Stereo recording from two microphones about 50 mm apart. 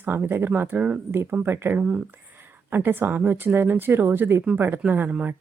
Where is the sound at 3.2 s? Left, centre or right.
Right.